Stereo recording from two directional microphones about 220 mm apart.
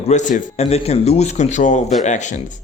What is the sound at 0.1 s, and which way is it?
Speech, 35° left (ahead or behind).